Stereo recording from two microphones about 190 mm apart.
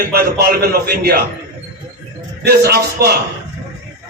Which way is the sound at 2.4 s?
55° right (ahead or behind).